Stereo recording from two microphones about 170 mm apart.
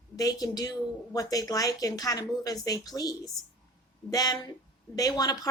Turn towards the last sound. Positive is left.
turn(degrees=25)  # may be behind; listen again after turning